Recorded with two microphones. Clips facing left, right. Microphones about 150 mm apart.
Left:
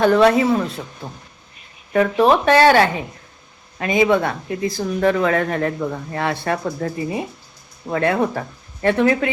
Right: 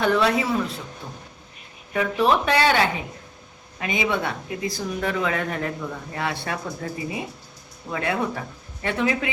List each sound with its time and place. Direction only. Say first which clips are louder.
0.0 s speech: left 7 dB; 45° left (ahead or behind)
1.9 s speech: left 6 dB; 50° left (ahead or behind)
2.6 s speech: left 7 dB; 60° left (ahead or behind)
3.8 s speech: left 8 dB; 50° left (ahead or behind)